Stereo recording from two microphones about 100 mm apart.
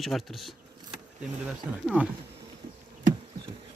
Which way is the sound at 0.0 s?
Centre (ahead or behind).